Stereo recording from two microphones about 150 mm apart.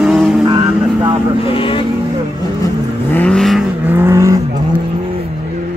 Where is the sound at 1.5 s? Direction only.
35° left (ahead or behind).